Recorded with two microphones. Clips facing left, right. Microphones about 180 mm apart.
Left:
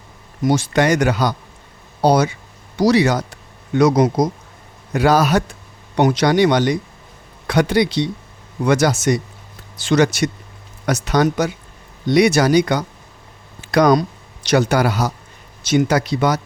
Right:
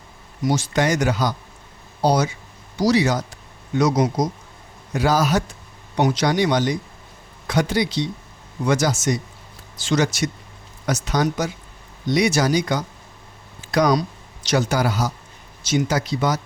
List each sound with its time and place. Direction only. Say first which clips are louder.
0.4 s a man's voice: left 4 dB; 60° left (ahead or behind)
13.6 s a sound: left 5 dB; 65° left (ahead or behind)
14.4 s a man's voice: left 5 dB; 60° left (ahead or behind)